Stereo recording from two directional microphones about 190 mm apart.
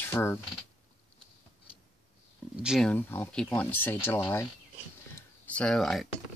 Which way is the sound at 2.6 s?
5° right (ahead or behind).